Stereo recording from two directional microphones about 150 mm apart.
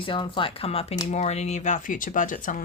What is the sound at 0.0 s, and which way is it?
Speech, 35° left (ahead or behind).